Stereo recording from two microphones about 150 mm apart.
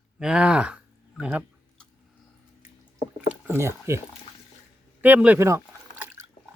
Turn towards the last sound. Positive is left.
turn(degrees=-15)  # may be behind; listen again after turning